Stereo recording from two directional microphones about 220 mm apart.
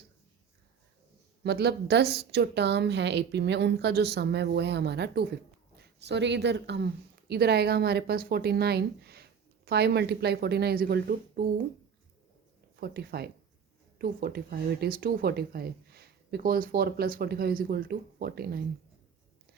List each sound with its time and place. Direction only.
1.5 s speech: 50° right (ahead or behind)
12.7 s speech: 45° right (ahead or behind)